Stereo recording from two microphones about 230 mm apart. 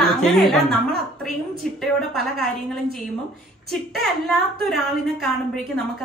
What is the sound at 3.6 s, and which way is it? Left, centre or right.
A woman's voice, centre.